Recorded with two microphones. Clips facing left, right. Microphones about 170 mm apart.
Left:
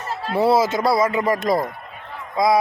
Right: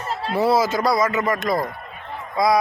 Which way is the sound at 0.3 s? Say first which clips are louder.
Left 2 dB; 25° left (ahead or behind).